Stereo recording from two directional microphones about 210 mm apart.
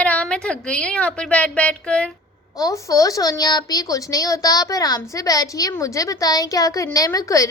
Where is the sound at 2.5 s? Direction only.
15° left (ahead or behind).